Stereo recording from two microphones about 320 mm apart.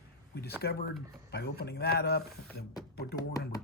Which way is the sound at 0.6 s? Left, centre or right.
Left.